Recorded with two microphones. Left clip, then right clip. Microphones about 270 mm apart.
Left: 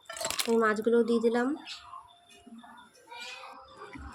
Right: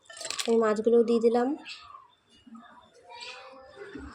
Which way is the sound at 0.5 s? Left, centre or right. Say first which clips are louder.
Right 3 dB; centre.